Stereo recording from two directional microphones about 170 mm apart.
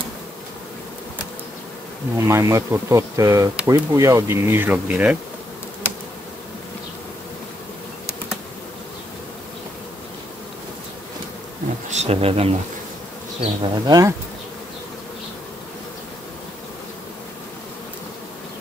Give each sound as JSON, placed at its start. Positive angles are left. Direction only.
{"t": 2.1, "sound": "speech", "side_deg": -15}
{"t": 11.9, "sound": "speech", "side_deg": -40}
{"t": 13.4, "sound": "bee", "side_deg": -25}